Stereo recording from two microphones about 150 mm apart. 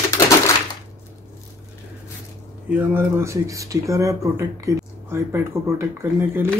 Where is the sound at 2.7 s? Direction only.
15° right (ahead or behind).